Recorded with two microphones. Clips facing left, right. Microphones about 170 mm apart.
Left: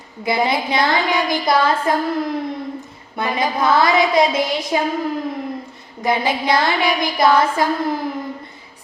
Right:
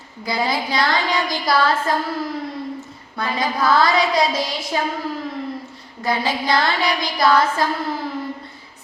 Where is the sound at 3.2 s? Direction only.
20° left (ahead or behind).